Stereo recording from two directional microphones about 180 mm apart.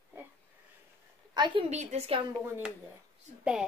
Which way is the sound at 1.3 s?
25° right (ahead or behind).